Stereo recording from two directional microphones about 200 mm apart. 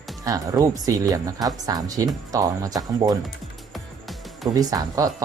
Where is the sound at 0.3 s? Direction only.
15° right (ahead or behind).